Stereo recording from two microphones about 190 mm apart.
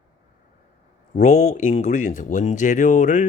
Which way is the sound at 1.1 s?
40° left (ahead or behind).